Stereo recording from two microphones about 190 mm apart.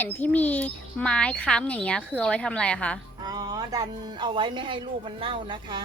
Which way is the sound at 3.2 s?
20° right (ahead or behind).